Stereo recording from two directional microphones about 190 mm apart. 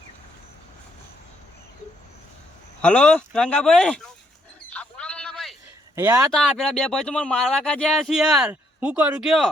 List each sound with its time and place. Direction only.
2.8 s speech: 5° left (ahead or behind)
4.7 s a sound: 5° left (ahead or behind)
6.0 s speech: 15° right (ahead or behind)
6.3 s speech: centre (ahead or behind)